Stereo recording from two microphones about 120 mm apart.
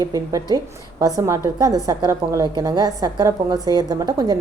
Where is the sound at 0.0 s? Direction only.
30° right (ahead or behind).